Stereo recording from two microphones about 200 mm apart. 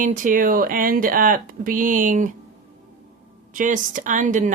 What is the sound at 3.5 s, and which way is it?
A woman's voice, 40° right (ahead or behind).